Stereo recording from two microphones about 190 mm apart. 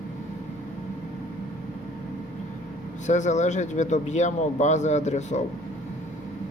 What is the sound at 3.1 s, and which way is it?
A man's voice, 40° left (ahead or behind).